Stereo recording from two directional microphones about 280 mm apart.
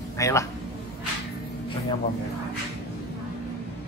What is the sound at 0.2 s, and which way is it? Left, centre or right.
Speech, centre.